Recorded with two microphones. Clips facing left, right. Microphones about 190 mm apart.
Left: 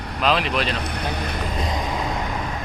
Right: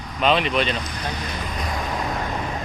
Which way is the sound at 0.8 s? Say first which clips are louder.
Left 3 dB; 60° left (ahead or behind).